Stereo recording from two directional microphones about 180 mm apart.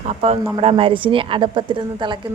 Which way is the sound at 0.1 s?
35° right (ahead or behind).